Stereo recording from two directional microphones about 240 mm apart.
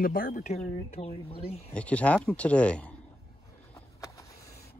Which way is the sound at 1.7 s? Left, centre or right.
Centre.